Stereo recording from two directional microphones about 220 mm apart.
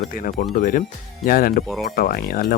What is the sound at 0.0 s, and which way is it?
Speech, 40° left (ahead or behind).